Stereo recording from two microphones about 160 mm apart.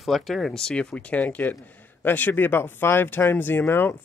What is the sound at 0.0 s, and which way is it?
Speech, centre (ahead or behind).